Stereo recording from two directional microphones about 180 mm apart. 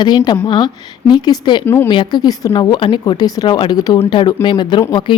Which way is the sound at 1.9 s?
25° left (ahead or behind).